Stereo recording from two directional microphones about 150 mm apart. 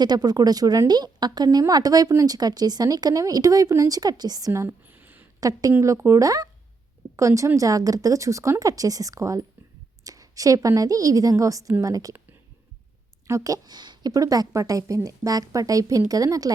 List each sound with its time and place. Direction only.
0.0 s speech: 25° right (ahead or behind)
5.4 s a woman's voice: 25° right (ahead or behind)
13.2 s speech: 20° right (ahead or behind)